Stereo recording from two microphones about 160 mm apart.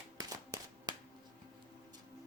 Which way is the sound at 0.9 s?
25° right (ahead or behind).